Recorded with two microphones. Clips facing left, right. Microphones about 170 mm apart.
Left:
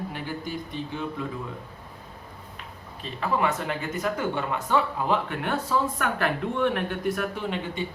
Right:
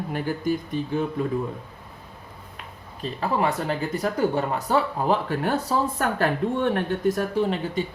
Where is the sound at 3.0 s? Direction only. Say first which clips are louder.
Right 2 dB; 35° right (ahead or behind).